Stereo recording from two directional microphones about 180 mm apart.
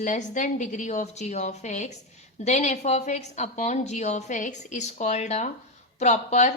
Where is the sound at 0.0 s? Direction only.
45° left (ahead or behind).